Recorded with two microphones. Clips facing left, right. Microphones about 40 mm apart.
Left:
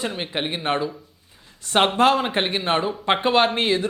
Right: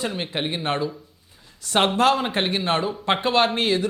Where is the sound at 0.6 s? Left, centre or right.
Left.